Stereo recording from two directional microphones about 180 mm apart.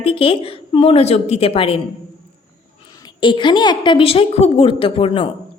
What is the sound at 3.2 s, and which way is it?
A woman's voice, 25° left (ahead or behind).